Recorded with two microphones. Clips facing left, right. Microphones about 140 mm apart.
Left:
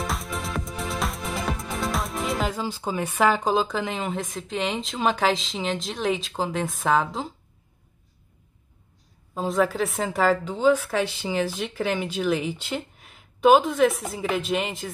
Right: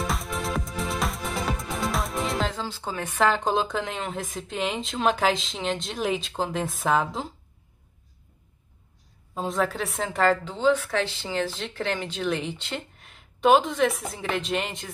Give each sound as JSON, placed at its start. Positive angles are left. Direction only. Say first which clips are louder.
{"t": 0.0, "sound": "music", "louder": "right 1 dB", "side_deg": 0}
{"t": 9.3, "sound": "a woman's voice", "louder": "left 3 dB", "side_deg": 5}